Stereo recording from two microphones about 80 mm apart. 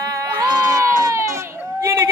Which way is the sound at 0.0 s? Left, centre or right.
Right.